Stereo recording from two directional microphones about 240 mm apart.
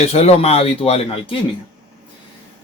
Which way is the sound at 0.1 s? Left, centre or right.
Left.